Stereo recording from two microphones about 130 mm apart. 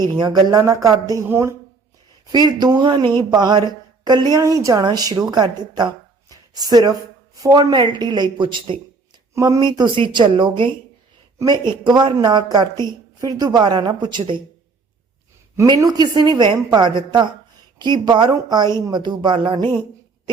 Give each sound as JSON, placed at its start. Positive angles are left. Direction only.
{"t": 0.0, "sound": "a woman's voice", "side_deg": -35}
{"t": 2.3, "sound": "a woman's voice", "side_deg": -35}
{"t": 9.3, "sound": "a woman's voice", "side_deg": -25}
{"t": 15.6, "sound": "a woman's voice", "side_deg": -30}